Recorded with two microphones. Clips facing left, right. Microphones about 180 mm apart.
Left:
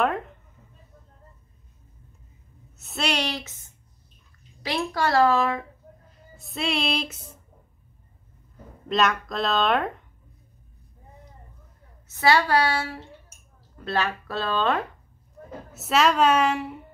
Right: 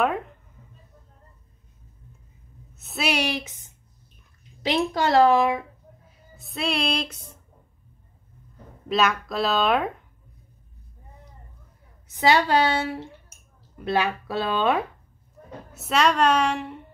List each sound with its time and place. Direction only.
0.0 s speech: centre (ahead or behind)
2.8 s a woman's voice: centre (ahead or behind)
6.0 s music: centre (ahead or behind)
8.8 s speech: centre (ahead or behind)
12.1 s speech: 20° right (ahead or behind)
15.7 s speech: centre (ahead or behind)